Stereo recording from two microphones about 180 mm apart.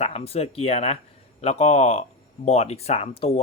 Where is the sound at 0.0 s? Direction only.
35° left (ahead or behind).